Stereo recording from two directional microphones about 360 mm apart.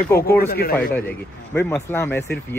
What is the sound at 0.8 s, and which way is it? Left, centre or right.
Speech, centre.